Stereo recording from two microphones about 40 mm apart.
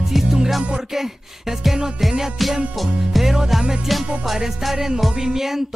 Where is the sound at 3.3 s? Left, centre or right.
Centre.